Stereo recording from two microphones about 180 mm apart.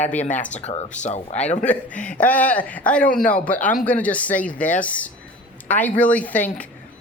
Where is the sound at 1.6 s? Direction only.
10° left (ahead or behind).